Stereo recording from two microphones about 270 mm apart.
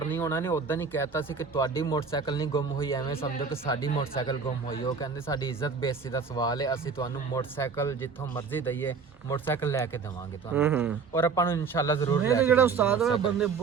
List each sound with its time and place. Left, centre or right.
0.1 s speech: centre
3.2 s speech: centre
10.5 s speech: centre
11.1 s speech: centre
12.5 s a man's voice: centre